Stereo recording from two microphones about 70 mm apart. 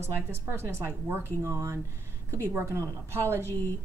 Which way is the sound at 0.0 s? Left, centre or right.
Right.